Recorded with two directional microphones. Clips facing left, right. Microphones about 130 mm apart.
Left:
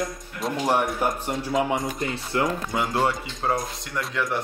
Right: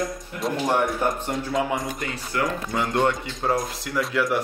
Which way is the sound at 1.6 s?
25° left (ahead or behind).